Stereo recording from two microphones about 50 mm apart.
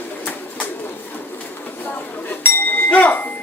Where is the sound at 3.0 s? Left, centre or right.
Left.